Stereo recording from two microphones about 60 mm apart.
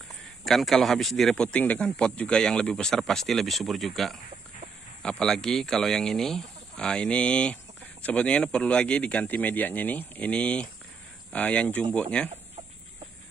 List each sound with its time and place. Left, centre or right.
0.5 s a man's voice: centre
1.6 s speech: left; by 4.2 s centre
5.2 s speech: centre